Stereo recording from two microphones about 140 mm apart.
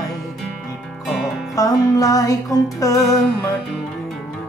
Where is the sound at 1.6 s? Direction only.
25° left (ahead or behind).